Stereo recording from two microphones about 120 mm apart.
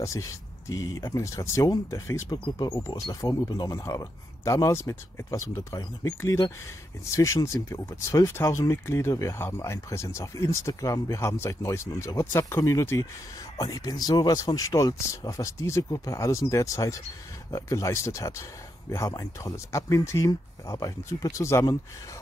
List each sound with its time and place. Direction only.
0.0 s speech: 25° left (ahead or behind)
2.2 s speech: 40° left (ahead or behind); by 21.6 s 25° left (ahead or behind)